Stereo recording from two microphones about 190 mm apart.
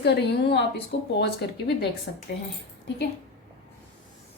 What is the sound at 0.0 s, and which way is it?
A woman's voice, 65° left (ahead or behind).